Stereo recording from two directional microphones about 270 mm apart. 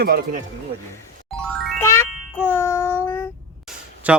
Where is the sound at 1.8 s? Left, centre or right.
Centre.